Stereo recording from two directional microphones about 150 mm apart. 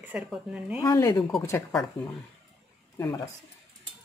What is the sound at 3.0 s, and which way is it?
Speech, 20° left (ahead or behind).